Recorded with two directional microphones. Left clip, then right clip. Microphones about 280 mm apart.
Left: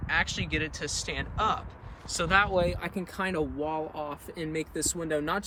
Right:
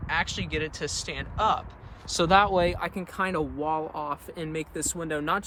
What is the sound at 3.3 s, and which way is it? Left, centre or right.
Speech, centre.